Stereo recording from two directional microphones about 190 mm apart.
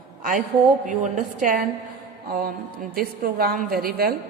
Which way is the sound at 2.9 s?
50° right (ahead or behind).